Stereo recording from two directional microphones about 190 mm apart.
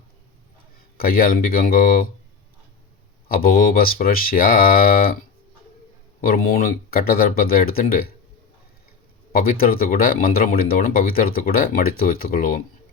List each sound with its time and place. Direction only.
0.9 s speech: 50° left (ahead or behind)
3.2 s speech: 50° left (ahead or behind)
6.2 s speech: 50° left (ahead or behind)
9.3 s speech: 50° left (ahead or behind)